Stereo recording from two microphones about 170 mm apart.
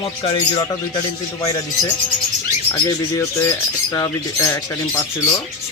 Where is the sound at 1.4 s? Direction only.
20° left (ahead or behind).